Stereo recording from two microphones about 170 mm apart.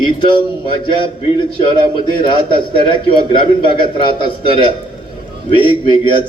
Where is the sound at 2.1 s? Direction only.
30° left (ahead or behind).